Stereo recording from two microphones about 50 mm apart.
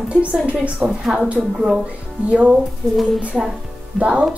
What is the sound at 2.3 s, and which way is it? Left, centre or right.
Speech, right.